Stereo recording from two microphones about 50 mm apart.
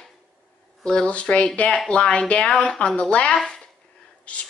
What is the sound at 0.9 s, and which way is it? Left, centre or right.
A woman's voice, centre.